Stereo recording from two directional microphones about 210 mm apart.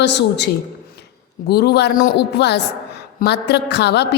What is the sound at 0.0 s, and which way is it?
A woman's voice, 55° left (ahead or behind).